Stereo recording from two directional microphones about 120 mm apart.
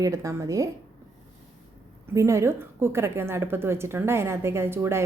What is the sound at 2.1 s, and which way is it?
A woman's voice, 25° right (ahead or behind).